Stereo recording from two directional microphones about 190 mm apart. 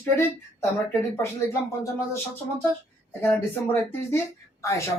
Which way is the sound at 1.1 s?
15° left (ahead or behind).